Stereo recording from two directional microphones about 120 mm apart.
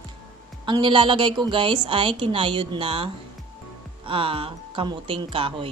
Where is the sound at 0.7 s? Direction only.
45° right (ahead or behind).